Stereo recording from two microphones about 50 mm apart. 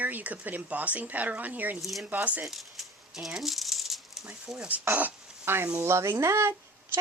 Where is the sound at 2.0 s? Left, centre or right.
Right.